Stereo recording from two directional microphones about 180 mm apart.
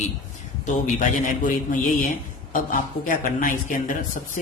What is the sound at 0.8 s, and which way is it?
A man's voice, 45° left (ahead or behind).